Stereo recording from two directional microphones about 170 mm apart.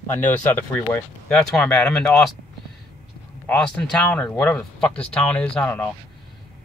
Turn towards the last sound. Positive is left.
turn(degrees=10)  # may be behind; listen again after turning